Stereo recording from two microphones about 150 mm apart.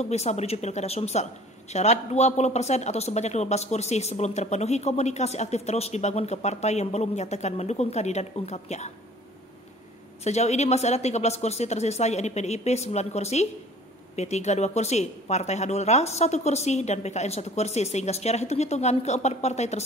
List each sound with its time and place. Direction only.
0.0 s speech: 45° left (ahead or behind)
10.2 s speech: 50° left (ahead or behind)